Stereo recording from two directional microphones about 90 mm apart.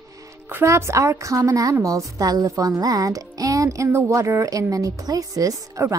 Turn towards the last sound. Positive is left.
turn(degrees=-40)  # may be behind; listen again after turning